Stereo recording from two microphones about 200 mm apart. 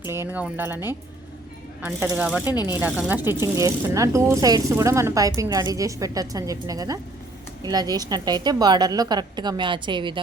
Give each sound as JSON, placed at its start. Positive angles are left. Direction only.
{"t": 0.0, "sound": "speech", "side_deg": -10}
{"t": 1.8, "sound": "a woman's voice", "side_deg": -5}